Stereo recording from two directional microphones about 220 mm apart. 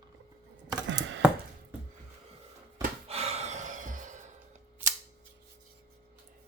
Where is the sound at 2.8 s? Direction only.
30° right (ahead or behind).